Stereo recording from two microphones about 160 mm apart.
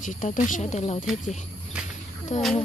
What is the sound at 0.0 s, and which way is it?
Speech, 50° left (ahead or behind).